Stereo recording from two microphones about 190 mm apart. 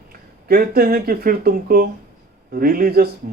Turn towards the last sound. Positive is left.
turn(degrees=-50)  # may be behind; listen again after turning